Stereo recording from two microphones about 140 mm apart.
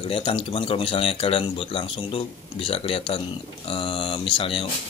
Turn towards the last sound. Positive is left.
turn(degrees=40)  # may be behind; listen again after turning